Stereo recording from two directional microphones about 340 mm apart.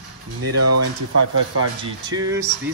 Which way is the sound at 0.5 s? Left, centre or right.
Right.